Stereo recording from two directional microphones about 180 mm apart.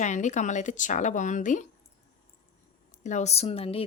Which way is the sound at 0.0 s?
40° left (ahead or behind).